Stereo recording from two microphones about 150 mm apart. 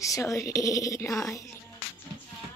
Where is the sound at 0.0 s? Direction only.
20° left (ahead or behind).